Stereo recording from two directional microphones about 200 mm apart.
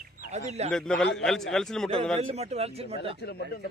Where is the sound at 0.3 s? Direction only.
35° right (ahead or behind).